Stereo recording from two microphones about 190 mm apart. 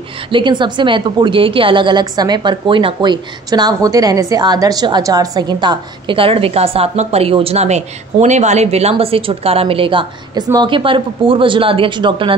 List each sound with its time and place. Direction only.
0.3 s a woman's voice: 25° right (ahead or behind)